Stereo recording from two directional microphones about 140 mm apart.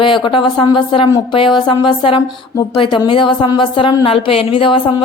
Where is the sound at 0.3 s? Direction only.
35° left (ahead or behind).